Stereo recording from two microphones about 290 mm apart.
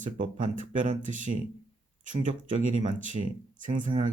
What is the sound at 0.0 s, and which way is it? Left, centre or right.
Speech, right.